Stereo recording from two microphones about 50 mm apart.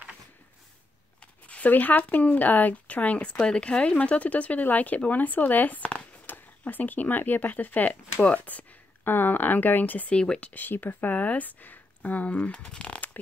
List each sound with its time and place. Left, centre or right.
1.2 s speech: left
9.0 s speech: left
10.1 s speech: centre
10.5 s speech: left